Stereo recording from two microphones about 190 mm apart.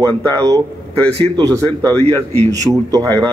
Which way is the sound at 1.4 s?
20° right (ahead or behind).